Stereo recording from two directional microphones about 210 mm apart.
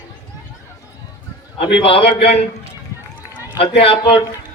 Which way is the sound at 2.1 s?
25° left (ahead or behind).